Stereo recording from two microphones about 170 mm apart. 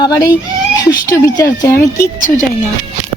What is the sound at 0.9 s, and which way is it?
Speech, 20° left (ahead or behind).